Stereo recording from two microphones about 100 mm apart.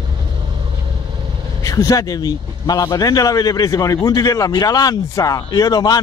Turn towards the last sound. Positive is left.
turn(degrees=40)  # may be behind; listen again after turning